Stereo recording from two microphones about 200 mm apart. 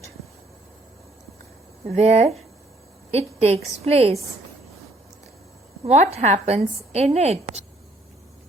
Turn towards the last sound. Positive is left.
turn(degrees=-30)  # may be behind; listen again after turning